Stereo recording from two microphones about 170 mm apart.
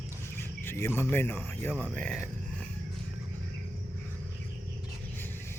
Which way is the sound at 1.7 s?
5° right (ahead or behind).